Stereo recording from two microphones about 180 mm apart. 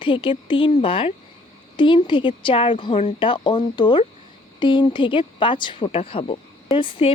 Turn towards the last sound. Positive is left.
turn(degrees=30)  # may be behind; listen again after turning